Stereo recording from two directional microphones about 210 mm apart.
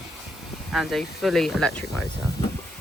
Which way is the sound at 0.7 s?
Centre (ahead or behind).